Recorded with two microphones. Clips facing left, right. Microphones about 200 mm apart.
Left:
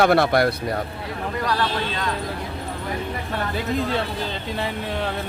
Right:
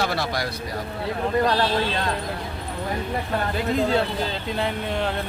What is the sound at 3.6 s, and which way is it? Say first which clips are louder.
Speech: right 2 dB; centre (ahead or behind).